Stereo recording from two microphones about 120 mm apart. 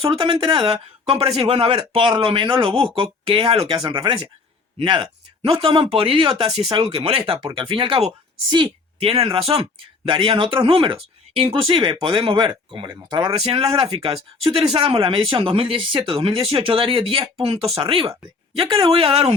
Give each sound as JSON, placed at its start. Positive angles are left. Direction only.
{"t": 0.0, "sound": "speech", "side_deg": -45}
{"t": 8.4, "sound": "speech", "side_deg": -40}
{"t": 9.0, "sound": "speech", "side_deg": -50}
{"t": 13.4, "sound": "speech", "side_deg": -50}